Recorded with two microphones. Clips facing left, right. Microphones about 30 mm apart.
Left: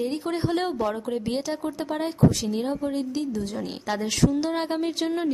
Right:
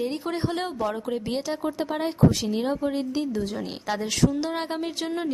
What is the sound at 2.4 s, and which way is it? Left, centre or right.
A woman's voice, centre.